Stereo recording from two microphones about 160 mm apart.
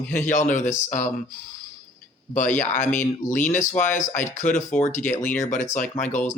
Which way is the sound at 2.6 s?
50° left (ahead or behind).